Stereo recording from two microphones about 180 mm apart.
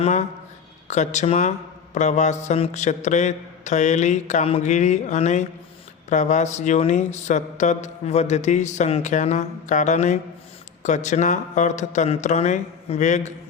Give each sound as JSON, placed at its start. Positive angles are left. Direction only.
{"t": 0.0, "sound": "speech", "side_deg": 40}